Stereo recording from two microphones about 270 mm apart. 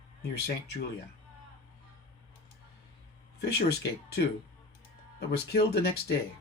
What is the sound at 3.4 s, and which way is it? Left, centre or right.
Speech, left.